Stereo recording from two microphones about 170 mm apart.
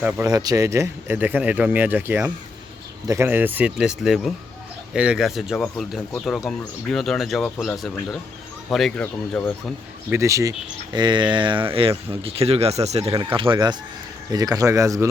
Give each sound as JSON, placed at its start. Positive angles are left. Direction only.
{"t": 0.0, "sound": "speech", "side_deg": -10}
{"t": 0.3, "sound": "speech", "side_deg": -20}
{"t": 10.1, "sound": "speech", "side_deg": -15}
{"t": 13.1, "sound": "speech", "side_deg": -25}